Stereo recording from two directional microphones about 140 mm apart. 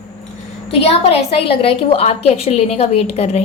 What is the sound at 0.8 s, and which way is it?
A woman's voice, 45° left (ahead or behind).